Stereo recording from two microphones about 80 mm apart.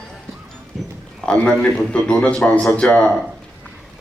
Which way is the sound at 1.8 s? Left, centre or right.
Centre.